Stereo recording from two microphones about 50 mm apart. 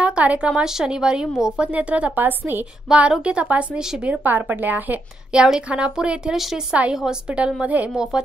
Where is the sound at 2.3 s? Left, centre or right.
Right.